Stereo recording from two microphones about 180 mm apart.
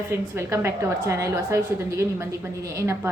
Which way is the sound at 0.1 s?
15° right (ahead or behind).